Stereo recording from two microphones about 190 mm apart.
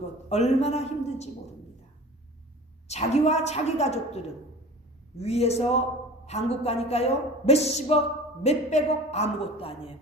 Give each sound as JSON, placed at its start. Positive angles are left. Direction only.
{"t": 0.3, "sound": "a woman's voice", "side_deg": 35}
{"t": 2.8, "sound": "a woman's voice", "side_deg": 35}